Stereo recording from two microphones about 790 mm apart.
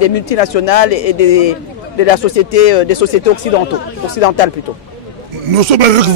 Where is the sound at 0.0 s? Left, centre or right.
Left.